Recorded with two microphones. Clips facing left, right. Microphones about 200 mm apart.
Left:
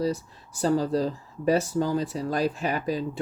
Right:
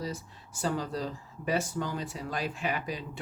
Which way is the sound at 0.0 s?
40° left (ahead or behind).